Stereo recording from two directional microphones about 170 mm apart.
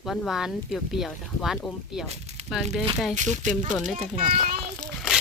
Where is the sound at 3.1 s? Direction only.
45° right (ahead or behind).